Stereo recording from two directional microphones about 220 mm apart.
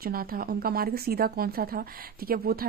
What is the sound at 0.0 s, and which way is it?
Speech, 40° right (ahead or behind).